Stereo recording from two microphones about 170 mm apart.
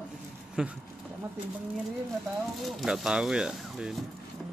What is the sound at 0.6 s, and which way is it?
Speech, 5° right (ahead or behind).